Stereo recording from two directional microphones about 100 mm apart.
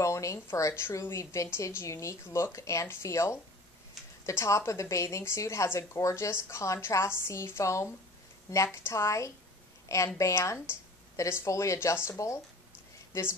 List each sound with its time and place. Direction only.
0.0 s a woman's voice: 30° left (ahead or behind)